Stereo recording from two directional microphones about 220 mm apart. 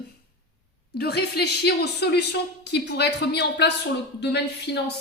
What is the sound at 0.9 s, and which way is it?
Speech, 45° left (ahead or behind).